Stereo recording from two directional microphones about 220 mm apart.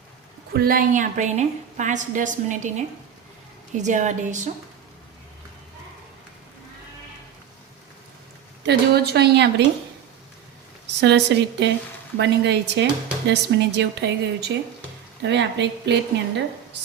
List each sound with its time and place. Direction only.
0.5 s a woman's voice: 40° right (ahead or behind)
3.8 s a woman's voice: 35° right (ahead or behind)
8.6 s speech: 45° right (ahead or behind)
11.0 s speech: 50° right (ahead or behind)